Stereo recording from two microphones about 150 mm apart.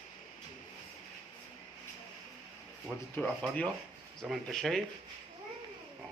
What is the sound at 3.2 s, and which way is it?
Speech, 10° left (ahead or behind).